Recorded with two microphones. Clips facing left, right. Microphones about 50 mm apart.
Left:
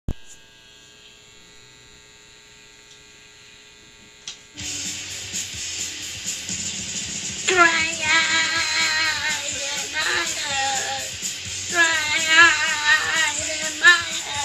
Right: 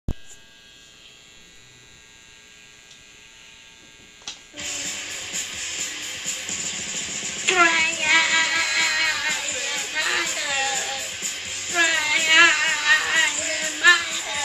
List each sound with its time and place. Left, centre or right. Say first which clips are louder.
4.6 s music: right 2 dB; right